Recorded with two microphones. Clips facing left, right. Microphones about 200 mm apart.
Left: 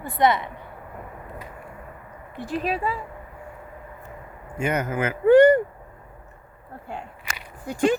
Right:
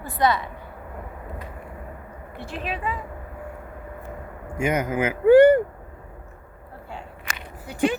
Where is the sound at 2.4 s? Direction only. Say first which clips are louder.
Left 5 dB; 40° left (ahead or behind).